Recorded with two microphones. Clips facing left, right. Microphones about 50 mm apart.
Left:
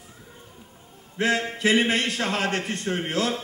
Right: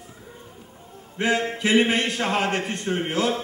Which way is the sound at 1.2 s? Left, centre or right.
Centre.